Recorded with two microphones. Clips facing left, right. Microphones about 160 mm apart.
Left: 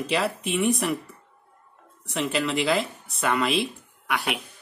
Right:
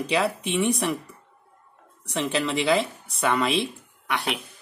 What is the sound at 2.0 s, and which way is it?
Speech, 5° left (ahead or behind).